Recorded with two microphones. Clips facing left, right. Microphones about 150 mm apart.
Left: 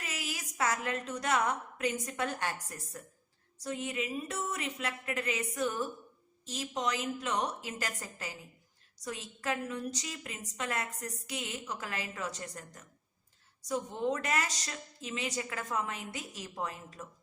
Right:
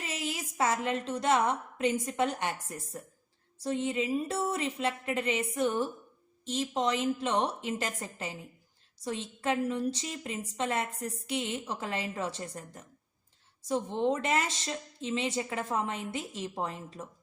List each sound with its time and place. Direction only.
0.0 s a woman's voice: 25° right (ahead or behind)